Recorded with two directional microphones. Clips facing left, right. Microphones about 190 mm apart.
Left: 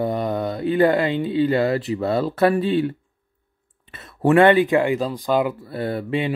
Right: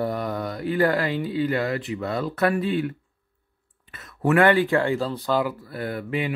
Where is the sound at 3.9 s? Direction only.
25° left (ahead or behind).